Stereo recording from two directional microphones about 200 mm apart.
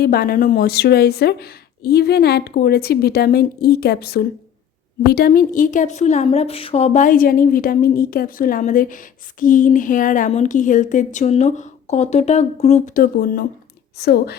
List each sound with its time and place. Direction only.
0.0 s a woman's voice: 50° left (ahead or behind)